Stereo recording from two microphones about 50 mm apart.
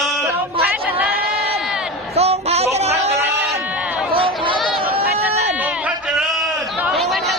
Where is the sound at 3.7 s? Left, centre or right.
Right.